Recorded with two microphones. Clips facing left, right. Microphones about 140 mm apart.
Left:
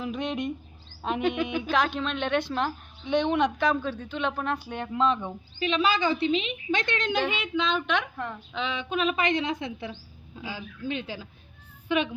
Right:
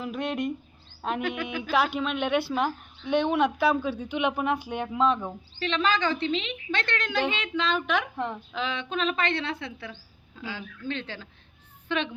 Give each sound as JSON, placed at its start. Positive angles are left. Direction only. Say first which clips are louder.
{"t": 0.0, "sound": "a woman's voice", "louder": "even", "side_deg": 0}
{"t": 5.5, "sound": "a woman's voice", "louder": "left 1 dB", "side_deg": 10}
{"t": 8.1, "sound": "a woman's voice", "louder": "right 3 dB", "side_deg": -20}
{"t": 8.5, "sound": "a woman's voice", "louder": "left 2 dB", "side_deg": 0}